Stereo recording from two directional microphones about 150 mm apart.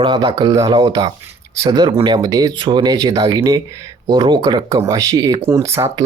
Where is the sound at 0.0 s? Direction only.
30° right (ahead or behind).